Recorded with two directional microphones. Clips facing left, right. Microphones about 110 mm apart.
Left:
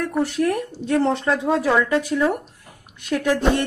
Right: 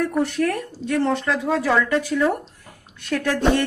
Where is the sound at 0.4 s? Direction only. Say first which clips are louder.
Left 1 dB; 15° left (ahead or behind).